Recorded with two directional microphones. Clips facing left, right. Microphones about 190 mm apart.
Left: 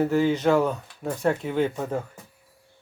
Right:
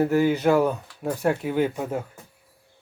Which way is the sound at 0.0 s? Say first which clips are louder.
Right 1 dB; 10° right (ahead or behind).